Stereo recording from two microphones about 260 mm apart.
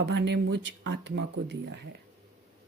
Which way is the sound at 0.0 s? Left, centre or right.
Right.